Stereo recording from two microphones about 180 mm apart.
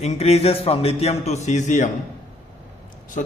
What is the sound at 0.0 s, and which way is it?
A man's voice, 35° left (ahead or behind).